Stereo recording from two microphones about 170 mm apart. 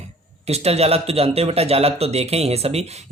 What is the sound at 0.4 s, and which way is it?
Speech, 40° right (ahead or behind).